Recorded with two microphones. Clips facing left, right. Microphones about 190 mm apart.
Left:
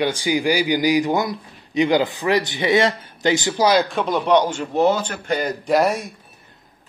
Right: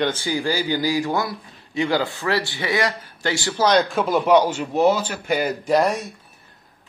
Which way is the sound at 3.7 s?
5° left (ahead or behind).